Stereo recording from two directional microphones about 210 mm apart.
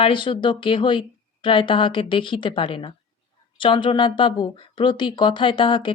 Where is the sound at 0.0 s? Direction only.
25° left (ahead or behind).